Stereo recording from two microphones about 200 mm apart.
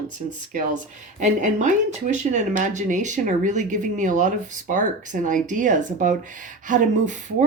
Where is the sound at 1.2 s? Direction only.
40° right (ahead or behind).